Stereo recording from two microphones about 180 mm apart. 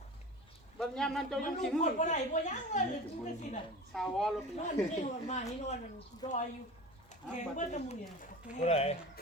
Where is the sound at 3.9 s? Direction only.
Centre (ahead or behind).